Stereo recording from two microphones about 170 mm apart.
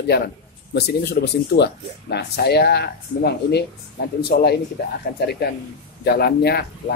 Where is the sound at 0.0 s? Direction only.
70° left (ahead or behind).